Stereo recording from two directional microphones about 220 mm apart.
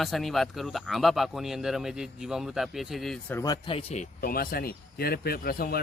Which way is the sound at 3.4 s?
20° left (ahead or behind).